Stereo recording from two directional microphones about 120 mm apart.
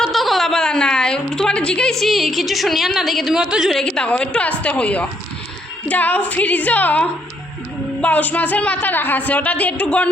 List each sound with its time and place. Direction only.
0.0 s a woman's voice: centre (ahead or behind)